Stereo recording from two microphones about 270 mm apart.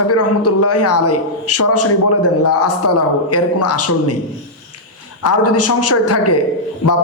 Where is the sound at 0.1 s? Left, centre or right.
Left.